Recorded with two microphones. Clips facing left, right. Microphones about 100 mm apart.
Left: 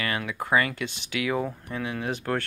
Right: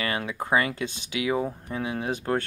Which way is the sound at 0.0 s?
30° right (ahead or behind).